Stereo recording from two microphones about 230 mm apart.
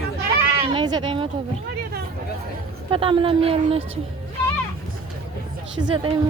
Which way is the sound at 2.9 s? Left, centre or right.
Right.